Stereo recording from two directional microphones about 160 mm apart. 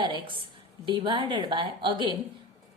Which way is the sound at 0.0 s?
30° right (ahead or behind).